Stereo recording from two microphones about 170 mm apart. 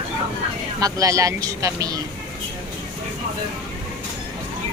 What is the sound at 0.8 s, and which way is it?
Speech, 20° right (ahead or behind).